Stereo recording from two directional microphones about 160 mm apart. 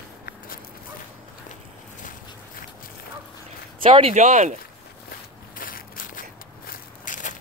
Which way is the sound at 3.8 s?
35° right (ahead or behind).